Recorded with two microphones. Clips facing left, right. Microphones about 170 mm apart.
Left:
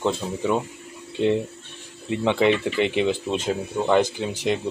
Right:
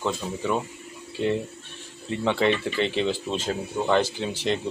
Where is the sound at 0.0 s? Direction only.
20° left (ahead or behind).